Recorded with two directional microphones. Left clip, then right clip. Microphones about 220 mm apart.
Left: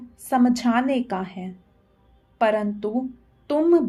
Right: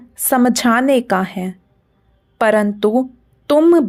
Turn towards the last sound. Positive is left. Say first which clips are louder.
# right 8 dB
turn(degrees=-45)  # may be behind; listen again after turning